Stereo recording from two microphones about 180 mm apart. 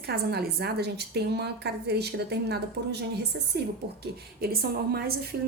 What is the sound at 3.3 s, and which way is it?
Speech, 75° right (ahead or behind).